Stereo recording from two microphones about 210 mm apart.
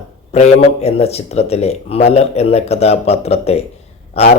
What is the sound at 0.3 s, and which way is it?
Speech, 30° left (ahead or behind).